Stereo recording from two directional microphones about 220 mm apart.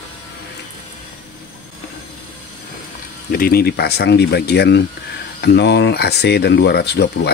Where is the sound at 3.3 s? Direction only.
40° left (ahead or behind).